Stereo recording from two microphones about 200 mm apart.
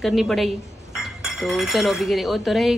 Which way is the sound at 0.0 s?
Centre (ahead or behind).